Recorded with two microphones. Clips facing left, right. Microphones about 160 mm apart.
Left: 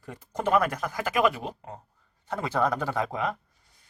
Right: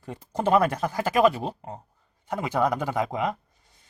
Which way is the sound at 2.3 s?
15° right (ahead or behind).